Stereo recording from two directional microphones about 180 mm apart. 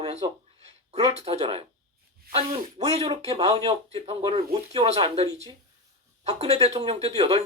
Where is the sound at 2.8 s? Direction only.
30° right (ahead or behind).